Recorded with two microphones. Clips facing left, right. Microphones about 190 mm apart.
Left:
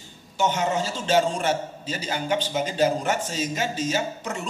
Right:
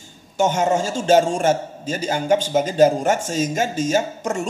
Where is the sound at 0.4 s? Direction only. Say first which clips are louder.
Right 5 dB; 45° right (ahead or behind).